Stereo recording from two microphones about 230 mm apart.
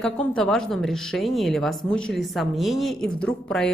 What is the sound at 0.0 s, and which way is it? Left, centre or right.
A woman's voice, centre.